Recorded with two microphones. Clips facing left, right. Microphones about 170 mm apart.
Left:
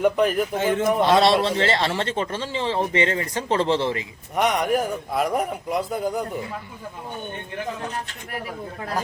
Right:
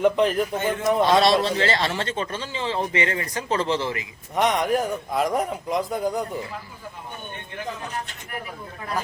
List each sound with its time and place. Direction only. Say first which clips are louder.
0.0 s a man's voice: even; 5° left (ahead or behind)
1.0 s speech: left 1 dB; 25° left (ahead or behind)
4.4 s a man's voice: even; 10° left (ahead or behind)